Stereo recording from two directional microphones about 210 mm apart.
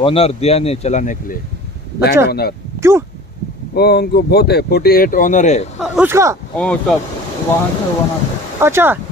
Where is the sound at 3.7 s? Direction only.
50° left (ahead or behind); by 5.7 s 35° left (ahead or behind).